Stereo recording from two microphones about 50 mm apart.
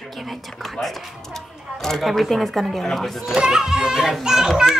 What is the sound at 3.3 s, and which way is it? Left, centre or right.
A child's voice, centre.